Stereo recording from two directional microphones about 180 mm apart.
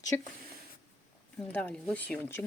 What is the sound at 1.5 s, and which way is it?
Speech, 5° left (ahead or behind).